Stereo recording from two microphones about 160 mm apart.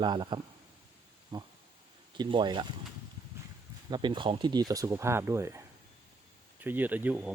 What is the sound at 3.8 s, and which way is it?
Speech, 30° right (ahead or behind).